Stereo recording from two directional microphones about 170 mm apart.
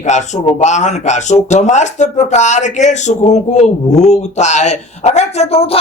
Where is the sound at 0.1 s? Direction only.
45° left (ahead or behind).